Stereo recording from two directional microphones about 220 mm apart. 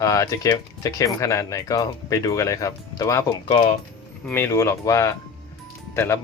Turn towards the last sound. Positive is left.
turn(degrees=10)  # may be behind; listen again after turning